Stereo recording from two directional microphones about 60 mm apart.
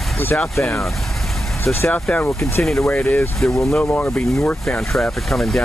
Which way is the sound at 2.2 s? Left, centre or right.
Left.